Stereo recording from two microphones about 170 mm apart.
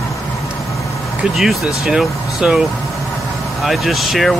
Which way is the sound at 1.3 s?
Centre (ahead or behind).